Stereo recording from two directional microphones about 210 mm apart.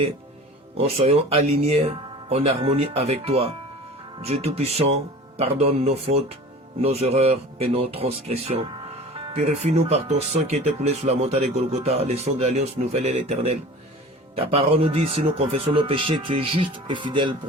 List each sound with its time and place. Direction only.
0.8 s speech: 30° right (ahead or behind)